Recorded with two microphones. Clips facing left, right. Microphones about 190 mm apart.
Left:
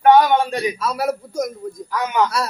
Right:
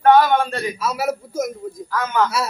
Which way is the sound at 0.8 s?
5° right (ahead or behind).